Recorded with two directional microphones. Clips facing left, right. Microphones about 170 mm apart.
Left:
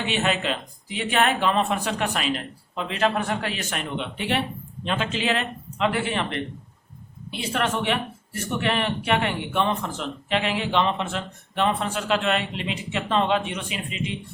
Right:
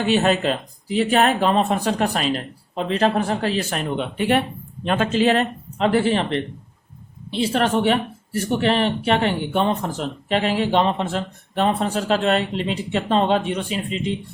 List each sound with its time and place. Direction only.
0.0 s speech: 40° right (ahead or behind)